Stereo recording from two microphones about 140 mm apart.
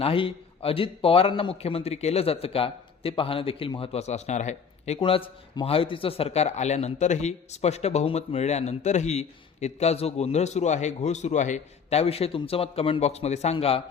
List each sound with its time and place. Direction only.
0.0 s a man's voice: 40° left (ahead or behind)